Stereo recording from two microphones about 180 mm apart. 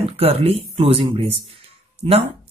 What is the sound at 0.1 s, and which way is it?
Speech, 35° right (ahead or behind).